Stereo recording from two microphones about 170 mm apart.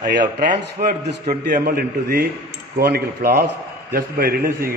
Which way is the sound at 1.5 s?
65° right (ahead or behind).